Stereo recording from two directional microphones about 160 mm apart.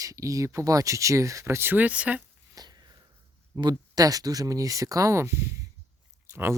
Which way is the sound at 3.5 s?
25° right (ahead or behind).